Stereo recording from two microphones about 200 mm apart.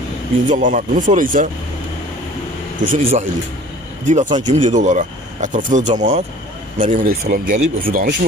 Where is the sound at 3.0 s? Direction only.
30° right (ahead or behind).